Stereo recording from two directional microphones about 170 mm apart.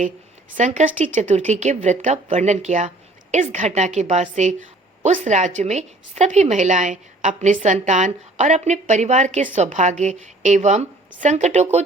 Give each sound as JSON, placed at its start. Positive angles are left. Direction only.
{"t": 0.5, "sound": "a woman's voice", "side_deg": -45}